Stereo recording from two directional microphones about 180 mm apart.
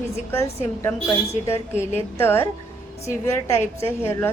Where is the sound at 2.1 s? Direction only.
10° left (ahead or behind).